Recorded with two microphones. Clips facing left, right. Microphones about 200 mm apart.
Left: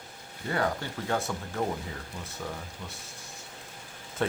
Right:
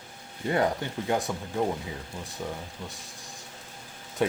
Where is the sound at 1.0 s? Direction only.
15° right (ahead or behind).